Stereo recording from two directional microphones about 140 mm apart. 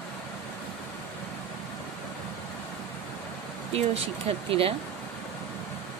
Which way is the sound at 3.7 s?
45° right (ahead or behind).